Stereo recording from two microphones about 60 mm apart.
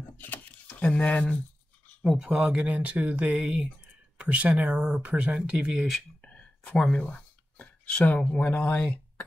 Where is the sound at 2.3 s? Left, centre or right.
Centre.